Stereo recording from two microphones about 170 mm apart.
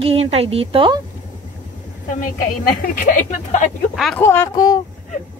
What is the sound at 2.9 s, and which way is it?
Speech, 55° left (ahead or behind).